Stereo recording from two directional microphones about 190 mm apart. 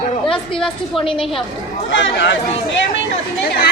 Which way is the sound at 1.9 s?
75° left (ahead or behind).